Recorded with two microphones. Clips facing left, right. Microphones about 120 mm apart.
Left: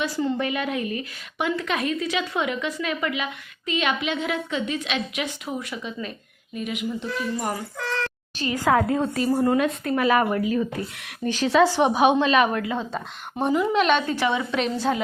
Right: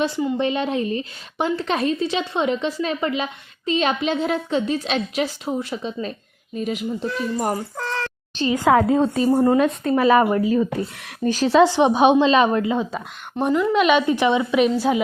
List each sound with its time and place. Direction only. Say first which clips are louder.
0.3 s a woman's voice: right 4 dB; 25° right (ahead or behind)
8.4 s a woman's voice: right 4 dB; 20° right (ahead or behind)
11.7 s speech: right 4 dB; 20° right (ahead or behind)
12.7 s a woman's voice: right 4 dB; 10° right (ahead or behind)
13.3 s a woman's voice: right 3 dB; 5° left (ahead or behind)
14.1 s a woman's voice: right 5 dB; 20° right (ahead or behind)